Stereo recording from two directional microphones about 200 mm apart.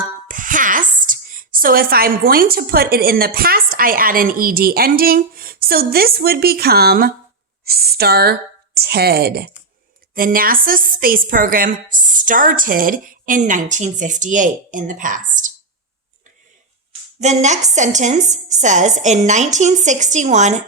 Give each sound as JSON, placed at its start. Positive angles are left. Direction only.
{"t": 0.3, "sound": "a woman's voice", "side_deg": -40}
{"t": 17.2, "sound": "a woman's voice", "side_deg": -35}